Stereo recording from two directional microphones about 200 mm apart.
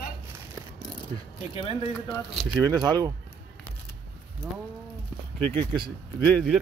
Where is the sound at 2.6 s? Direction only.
20° right (ahead or behind).